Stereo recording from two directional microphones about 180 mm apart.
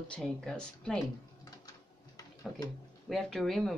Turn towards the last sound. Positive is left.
turn(degrees=0)  # may be behind; listen again after turning